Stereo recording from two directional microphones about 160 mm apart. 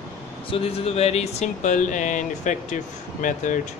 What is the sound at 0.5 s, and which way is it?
Speech, 40° left (ahead or behind).